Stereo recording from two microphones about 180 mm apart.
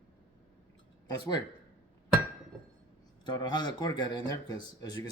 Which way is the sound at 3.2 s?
25° left (ahead or behind).